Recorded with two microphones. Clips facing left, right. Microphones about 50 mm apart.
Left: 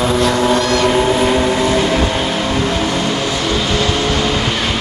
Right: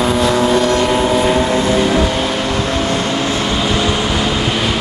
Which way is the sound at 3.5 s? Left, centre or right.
Centre.